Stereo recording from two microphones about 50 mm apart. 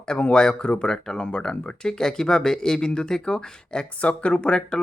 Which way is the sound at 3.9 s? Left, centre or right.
Left.